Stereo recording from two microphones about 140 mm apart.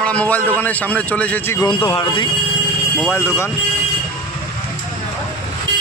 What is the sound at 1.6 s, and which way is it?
Speech, 40° left (ahead or behind).